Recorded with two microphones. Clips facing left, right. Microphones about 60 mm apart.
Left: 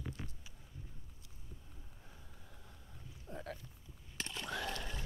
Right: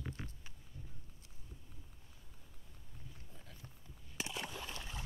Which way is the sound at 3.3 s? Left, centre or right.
Left.